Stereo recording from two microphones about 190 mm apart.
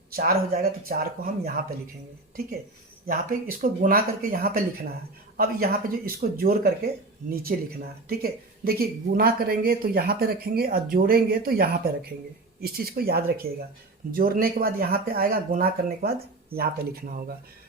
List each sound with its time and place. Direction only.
0.2 s speech: 55° right (ahead or behind)
3.1 s speech: 45° right (ahead or behind)